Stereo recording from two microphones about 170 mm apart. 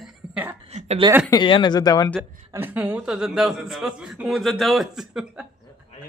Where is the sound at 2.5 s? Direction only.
10° right (ahead or behind).